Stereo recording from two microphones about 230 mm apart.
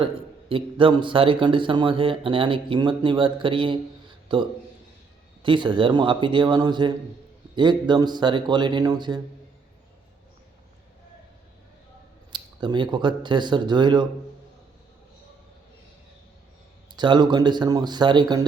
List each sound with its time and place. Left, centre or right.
0.0 s a man's voice: right
12.3 s a man's voice: centre
16.9 s a man's voice: centre